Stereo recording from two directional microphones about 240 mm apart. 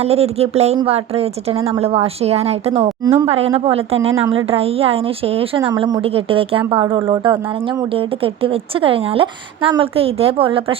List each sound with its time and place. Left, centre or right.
0.0 s a woman's voice: right